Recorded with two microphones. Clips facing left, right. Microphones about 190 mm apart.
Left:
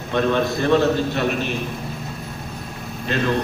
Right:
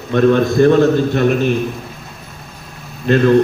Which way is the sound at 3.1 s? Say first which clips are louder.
Right 10 dB; 50° right (ahead or behind).